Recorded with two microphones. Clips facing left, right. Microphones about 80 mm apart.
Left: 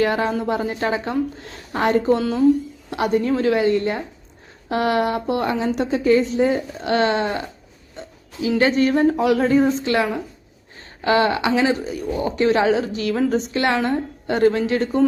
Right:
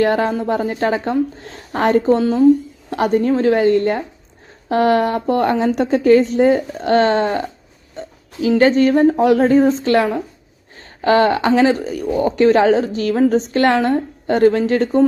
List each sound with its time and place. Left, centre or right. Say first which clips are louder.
0.0 s a woman's voice: right 4 dB; right
2.9 s a woman's voice: right 4 dB; right